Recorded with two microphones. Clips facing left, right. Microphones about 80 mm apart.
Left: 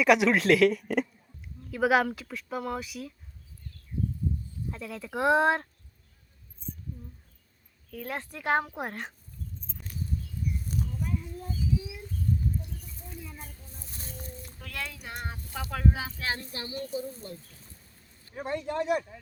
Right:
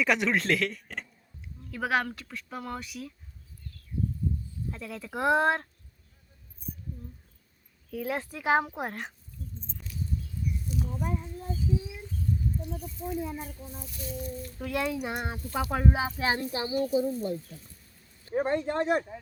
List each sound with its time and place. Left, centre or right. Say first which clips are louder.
0.0 s speech: left 4 dB; centre
4.7 s speech: left 2 dB; centre
7.9 s speech: right 4 dB; centre
9.4 s a sound: even; left
10.8 s child singing: right 2 dB; right
12.7 s speech: right 11 dB; right
13.8 s a sound: right 7 dB; left
14.6 s speech: right 10 dB; centre
18.3 s speech: right 5 dB; right